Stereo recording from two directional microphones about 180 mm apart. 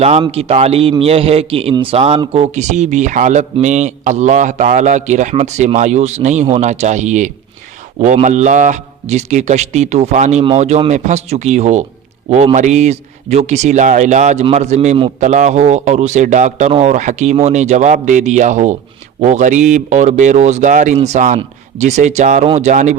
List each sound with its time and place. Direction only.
0.0 s a man's voice: 35° right (ahead or behind)